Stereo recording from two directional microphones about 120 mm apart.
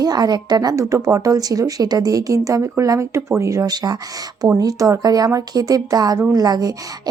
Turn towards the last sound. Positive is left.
turn(degrees=-35)  # may be behind; listen again after turning